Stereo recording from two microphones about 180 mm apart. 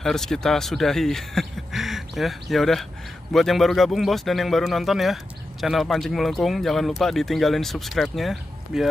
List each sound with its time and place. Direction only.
0.0 s a man's voice: 5° left (ahead or behind)